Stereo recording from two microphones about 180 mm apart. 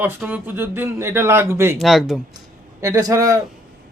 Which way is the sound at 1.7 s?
Centre (ahead or behind).